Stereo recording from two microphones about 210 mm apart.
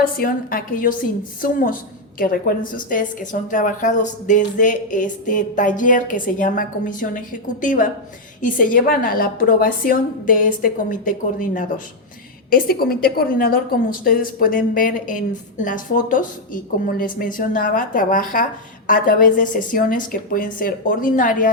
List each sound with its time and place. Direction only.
0.0 s a woman's voice: 45° left (ahead or behind)